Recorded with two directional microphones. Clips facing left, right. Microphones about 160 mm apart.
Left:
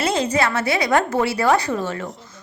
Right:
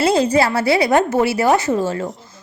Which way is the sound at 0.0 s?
30° right (ahead or behind).